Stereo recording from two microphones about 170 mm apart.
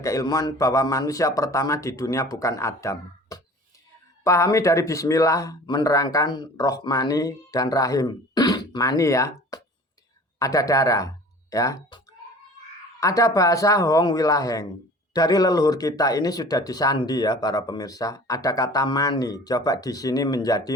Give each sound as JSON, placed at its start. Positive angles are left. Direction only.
{"t": 0.0, "sound": "speech", "side_deg": 20}
{"t": 13.0, "sound": "speech", "side_deg": 20}